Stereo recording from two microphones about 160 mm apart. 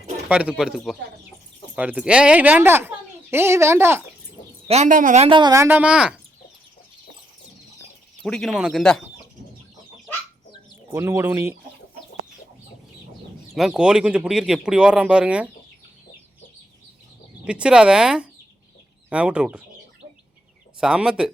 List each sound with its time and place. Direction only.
0.3 s speech: 5° right (ahead or behind)
4.7 s a woman's voice: 50° right (ahead or behind)
5.3 s speech: 25° right (ahead or behind)
5.6 s speech: 10° right (ahead or behind)
8.2 s speech: centre (ahead or behind)
10.9 s speech: 15° right (ahead or behind)
13.5 s speech: 5° right (ahead or behind)
17.4 s speech: 5° right (ahead or behind)
20.8 s speech: 5° right (ahead or behind)